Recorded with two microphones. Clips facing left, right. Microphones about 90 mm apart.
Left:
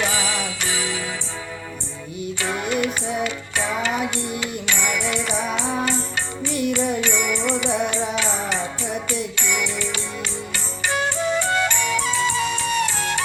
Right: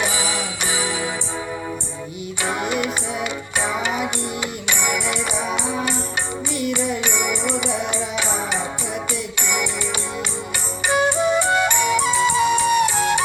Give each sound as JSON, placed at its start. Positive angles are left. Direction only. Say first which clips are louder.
{"t": 0.0, "sound": "music", "louder": "even", "side_deg": -15}
{"t": 2.4, "sound": "music", "louder": "right 1 dB", "side_deg": -15}
{"t": 6.5, "sound": "music", "louder": "left 2 dB", "side_deg": -55}
{"t": 7.0, "sound": "music", "louder": "even", "side_deg": -15}